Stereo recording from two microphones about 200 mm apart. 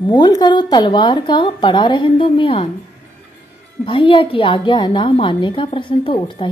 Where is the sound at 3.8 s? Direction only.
25° left (ahead or behind).